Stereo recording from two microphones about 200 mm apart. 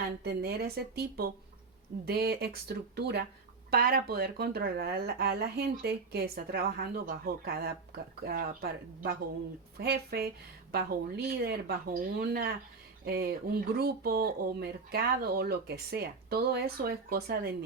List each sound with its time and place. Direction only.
0.3 s speech: 50° right (ahead or behind)